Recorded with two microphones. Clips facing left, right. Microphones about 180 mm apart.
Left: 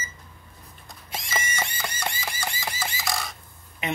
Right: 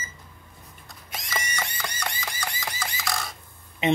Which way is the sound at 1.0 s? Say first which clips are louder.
Left 2 dB; 25° left (ahead or behind).